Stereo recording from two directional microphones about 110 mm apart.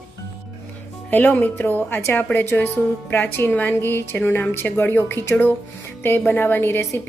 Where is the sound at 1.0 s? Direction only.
15° left (ahead or behind).